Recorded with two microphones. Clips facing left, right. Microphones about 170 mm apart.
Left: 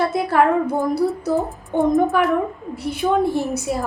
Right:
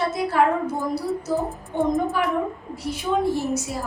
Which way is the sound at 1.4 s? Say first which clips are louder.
Left 4 dB; centre (ahead or behind).